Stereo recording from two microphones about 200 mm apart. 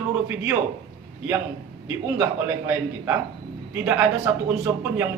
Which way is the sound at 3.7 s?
10° right (ahead or behind).